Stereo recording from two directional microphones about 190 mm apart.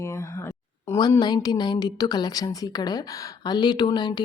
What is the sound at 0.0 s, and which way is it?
Speech, 15° left (ahead or behind).